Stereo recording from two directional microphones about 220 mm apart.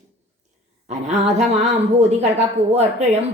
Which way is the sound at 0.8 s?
30° right (ahead or behind).